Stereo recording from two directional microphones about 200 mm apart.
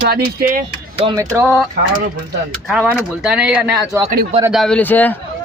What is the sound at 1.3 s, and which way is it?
A man's voice, 5° right (ahead or behind).